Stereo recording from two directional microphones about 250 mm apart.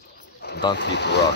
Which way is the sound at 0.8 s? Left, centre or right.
Left.